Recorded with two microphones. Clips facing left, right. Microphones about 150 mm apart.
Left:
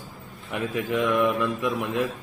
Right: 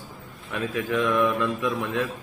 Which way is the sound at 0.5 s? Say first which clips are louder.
Even; 15° left (ahead or behind).